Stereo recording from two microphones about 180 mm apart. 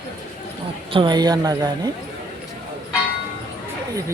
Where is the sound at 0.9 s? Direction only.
25° right (ahead or behind).